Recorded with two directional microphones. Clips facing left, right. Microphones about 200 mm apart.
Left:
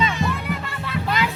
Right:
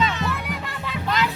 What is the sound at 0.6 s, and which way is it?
Music, 15° right (ahead or behind).